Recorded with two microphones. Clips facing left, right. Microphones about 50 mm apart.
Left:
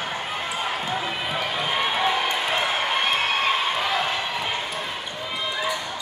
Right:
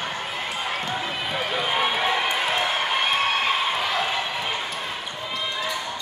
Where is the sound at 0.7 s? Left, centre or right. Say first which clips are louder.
Left 1 dB; centre.